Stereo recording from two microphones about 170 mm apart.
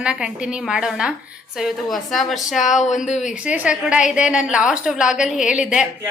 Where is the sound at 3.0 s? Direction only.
40° left (ahead or behind).